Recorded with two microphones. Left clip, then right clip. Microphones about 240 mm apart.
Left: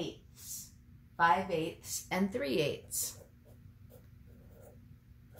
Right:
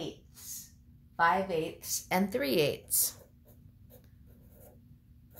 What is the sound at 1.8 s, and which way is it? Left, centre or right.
Speech, right.